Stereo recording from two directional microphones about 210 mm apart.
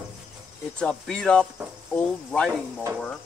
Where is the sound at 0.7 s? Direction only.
5° left (ahead or behind).